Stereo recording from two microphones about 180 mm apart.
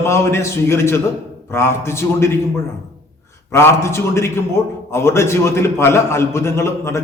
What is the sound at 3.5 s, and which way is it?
A man's voice, 15° left (ahead or behind).